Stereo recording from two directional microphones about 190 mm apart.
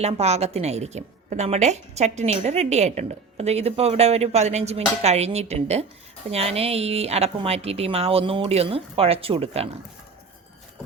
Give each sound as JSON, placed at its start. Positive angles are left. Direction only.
{"t": 0.0, "sound": "a woman's voice", "side_deg": -35}